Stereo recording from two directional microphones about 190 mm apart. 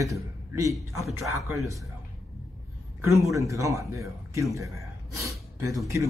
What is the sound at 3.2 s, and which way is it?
A man's voice, 15° right (ahead or behind).